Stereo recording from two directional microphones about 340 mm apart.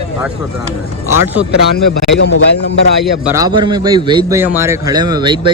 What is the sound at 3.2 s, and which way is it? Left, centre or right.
A man's voice, centre.